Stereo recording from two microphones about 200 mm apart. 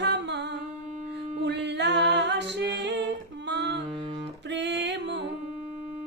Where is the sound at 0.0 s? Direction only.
60° right (ahead or behind).